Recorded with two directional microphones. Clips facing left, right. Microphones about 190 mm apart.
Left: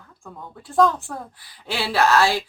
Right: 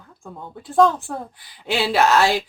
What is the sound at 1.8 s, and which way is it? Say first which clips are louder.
Speech: right 1 dB; 20° right (ahead or behind).